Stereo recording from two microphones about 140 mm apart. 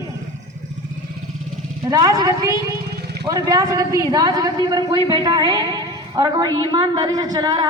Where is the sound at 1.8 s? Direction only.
25° right (ahead or behind).